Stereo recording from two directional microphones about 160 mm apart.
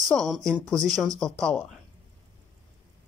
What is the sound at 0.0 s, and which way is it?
Speech, centre (ahead or behind).